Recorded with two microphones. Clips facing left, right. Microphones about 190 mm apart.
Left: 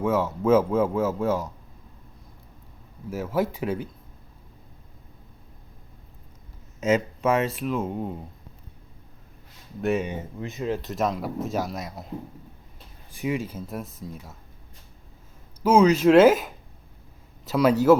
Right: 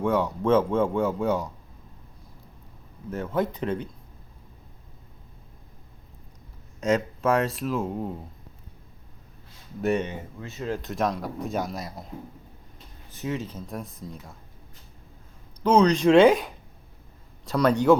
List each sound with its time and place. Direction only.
0.0 s a man's voice: 5° left (ahead or behind)
3.1 s speech: 5° left (ahead or behind)
6.7 s a man's voice: 5° left (ahead or behind)
9.8 s a man's voice: centre (ahead or behind)
10.1 s speech: 15° left (ahead or behind)
10.7 s a man's voice: centre (ahead or behind)
13.1 s a man's voice: 10° left (ahead or behind)
15.6 s a man's voice: 5° left (ahead or behind)